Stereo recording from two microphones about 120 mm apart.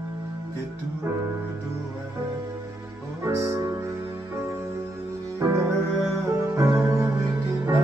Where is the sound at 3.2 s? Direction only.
25° right (ahead or behind).